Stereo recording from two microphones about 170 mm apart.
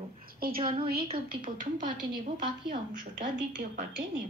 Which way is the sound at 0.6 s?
30° right (ahead or behind).